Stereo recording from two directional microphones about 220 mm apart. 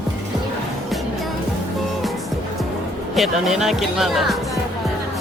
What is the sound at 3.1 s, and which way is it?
Speech, centre (ahead or behind).